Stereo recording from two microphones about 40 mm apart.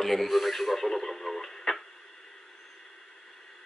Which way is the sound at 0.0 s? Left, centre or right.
Centre.